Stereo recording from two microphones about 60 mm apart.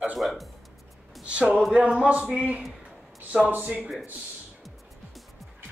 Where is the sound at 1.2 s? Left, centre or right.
Centre.